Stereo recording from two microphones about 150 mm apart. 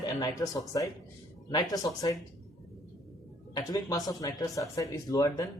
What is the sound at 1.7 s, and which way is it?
Speech, 25° left (ahead or behind).